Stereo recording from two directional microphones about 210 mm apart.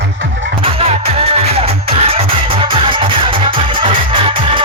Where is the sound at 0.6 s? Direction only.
30° right (ahead or behind).